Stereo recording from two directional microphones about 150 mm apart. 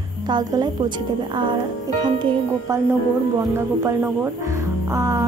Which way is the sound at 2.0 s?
30° right (ahead or behind).